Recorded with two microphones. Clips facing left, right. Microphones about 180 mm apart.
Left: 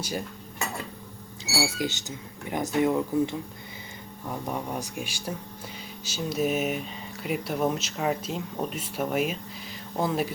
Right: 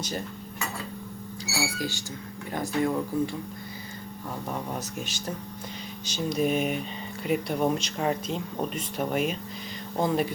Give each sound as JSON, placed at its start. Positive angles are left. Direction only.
{"t": 0.0, "sound": "speech", "side_deg": 10}
{"t": 1.5, "sound": "speech", "side_deg": 20}